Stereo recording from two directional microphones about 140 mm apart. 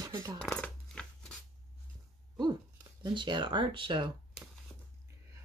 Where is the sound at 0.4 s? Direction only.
5° left (ahead or behind).